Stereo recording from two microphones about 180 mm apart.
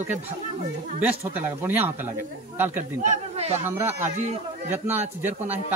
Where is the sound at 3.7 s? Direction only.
10° right (ahead or behind).